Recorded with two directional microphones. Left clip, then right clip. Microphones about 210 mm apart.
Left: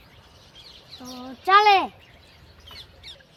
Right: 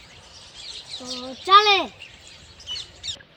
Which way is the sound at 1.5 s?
5° right (ahead or behind).